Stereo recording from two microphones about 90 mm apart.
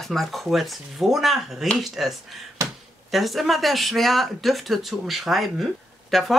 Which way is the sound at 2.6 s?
35° right (ahead or behind).